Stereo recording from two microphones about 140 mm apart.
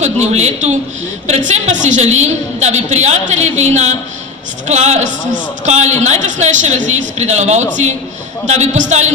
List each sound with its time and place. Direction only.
0.0 s a woman's voice: 50° right (ahead or behind)